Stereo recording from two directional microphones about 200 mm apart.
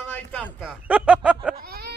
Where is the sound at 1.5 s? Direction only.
50° right (ahead or behind).